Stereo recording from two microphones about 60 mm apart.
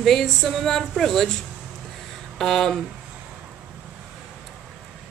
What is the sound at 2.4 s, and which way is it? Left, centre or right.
Speech, centre.